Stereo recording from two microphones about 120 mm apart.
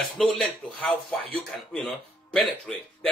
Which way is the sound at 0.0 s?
5° left (ahead or behind).